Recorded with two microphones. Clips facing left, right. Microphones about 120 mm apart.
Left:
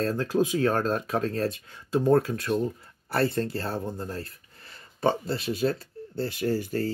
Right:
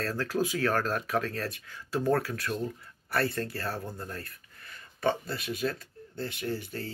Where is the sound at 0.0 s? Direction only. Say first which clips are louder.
Left 5 dB; 20° left (ahead or behind).